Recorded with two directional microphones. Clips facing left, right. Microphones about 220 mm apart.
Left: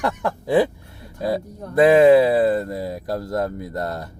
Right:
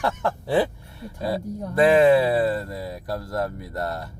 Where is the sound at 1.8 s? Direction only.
20° left (ahead or behind).